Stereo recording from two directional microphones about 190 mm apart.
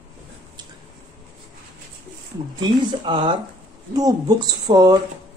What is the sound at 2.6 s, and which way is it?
Speech, 25° right (ahead or behind).